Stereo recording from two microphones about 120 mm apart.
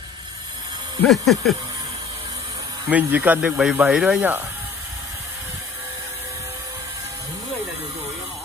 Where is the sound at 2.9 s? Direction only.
15° right (ahead or behind).